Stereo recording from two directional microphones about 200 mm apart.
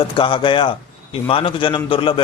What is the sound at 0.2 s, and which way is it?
A man's voice, 25° left (ahead or behind).